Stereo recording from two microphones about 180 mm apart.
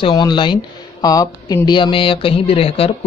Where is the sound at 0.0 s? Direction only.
25° left (ahead or behind).